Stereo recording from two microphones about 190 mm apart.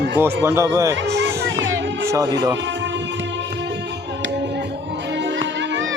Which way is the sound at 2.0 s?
20° right (ahead or behind).